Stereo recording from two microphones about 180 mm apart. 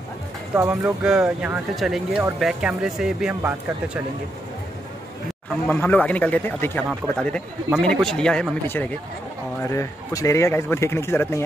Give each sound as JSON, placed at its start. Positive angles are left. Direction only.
{"t": 0.6, "sound": "speech", "side_deg": -10}
{"t": 5.7, "sound": "speech", "side_deg": 10}